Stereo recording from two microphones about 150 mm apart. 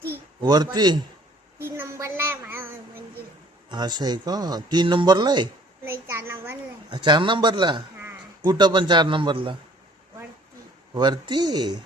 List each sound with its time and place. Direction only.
0.4 s speech: 25° right (ahead or behind)
1.5 s a sound: 15° right (ahead or behind)
3.7 s speech: 30° right (ahead or behind)
5.8 s a sound: 15° right (ahead or behind)
6.9 s a man's voice: 30° right (ahead or behind)
10.9 s speech: 30° right (ahead or behind)